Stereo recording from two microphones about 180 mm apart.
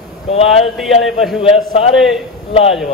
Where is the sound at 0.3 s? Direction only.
35° left (ahead or behind).